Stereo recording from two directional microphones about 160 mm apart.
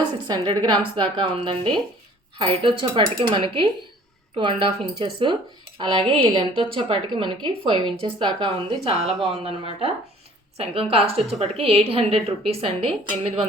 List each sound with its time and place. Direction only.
0.3 s a woman's voice: 30° right (ahead or behind)
9.0 s speech: centre (ahead or behind)
9.4 s speech: 40° right (ahead or behind)